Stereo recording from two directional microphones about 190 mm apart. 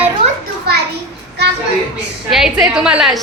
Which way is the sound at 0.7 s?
55° right (ahead or behind).